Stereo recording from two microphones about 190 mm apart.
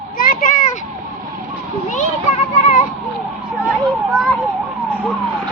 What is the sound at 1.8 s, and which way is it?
Speech, 40° left (ahead or behind).